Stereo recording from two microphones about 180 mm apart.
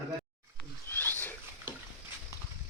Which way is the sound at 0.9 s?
10° left (ahead or behind).